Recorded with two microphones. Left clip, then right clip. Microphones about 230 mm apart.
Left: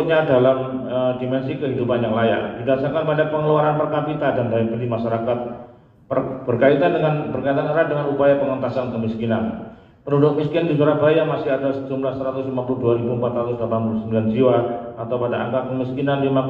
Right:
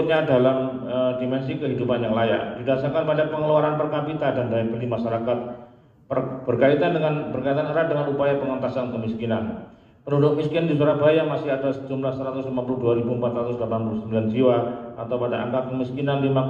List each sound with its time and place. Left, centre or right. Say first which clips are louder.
0.0 s a man's voice: left 3 dB; right
10.1 s a man's voice: left 3 dB; right